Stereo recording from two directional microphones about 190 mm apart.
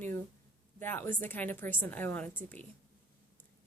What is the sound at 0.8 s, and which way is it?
Speech, 10° left (ahead or behind).